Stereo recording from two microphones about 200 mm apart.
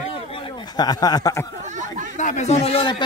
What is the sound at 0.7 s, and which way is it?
Speech, 20° left (ahead or behind).